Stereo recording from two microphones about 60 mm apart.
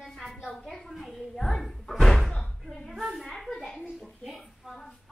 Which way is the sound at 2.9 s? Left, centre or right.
Centre.